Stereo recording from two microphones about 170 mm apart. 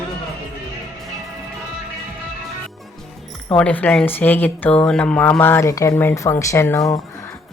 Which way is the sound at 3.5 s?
10° left (ahead or behind).